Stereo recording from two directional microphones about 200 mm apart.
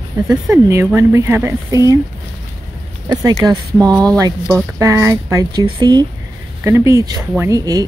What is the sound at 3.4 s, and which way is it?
Speech, 15° right (ahead or behind).